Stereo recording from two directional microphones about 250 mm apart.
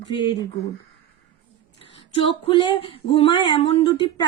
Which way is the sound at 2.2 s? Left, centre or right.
Left.